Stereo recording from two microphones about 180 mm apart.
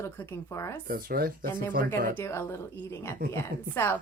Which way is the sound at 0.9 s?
55° right (ahead or behind).